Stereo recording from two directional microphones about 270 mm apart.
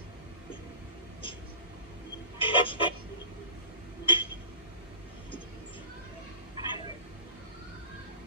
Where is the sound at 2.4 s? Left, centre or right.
Centre.